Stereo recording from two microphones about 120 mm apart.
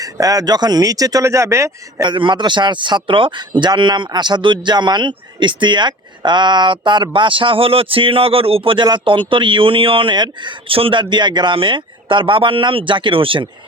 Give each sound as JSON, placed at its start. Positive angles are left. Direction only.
{"t": 0.0, "sound": "speech", "side_deg": -30}
{"t": 2.0, "sound": "a man's voice", "side_deg": -45}